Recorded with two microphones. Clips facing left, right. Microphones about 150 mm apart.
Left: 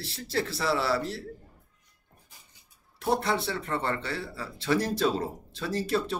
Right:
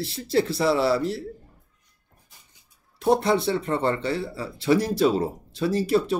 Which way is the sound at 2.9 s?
20° right (ahead or behind).